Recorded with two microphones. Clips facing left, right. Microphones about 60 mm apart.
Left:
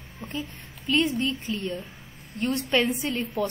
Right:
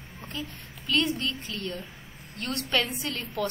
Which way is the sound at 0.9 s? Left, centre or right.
Left.